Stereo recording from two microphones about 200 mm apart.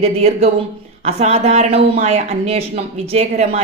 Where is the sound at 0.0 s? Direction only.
30° right (ahead or behind).